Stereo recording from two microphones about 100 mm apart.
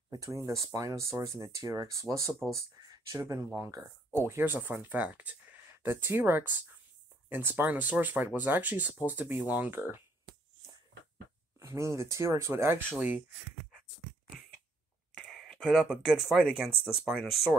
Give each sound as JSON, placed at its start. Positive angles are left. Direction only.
{"t": 0.1, "sound": "speech", "side_deg": -35}
{"t": 11.6, "sound": "speech", "side_deg": -30}
{"t": 15.1, "sound": "speech", "side_deg": 0}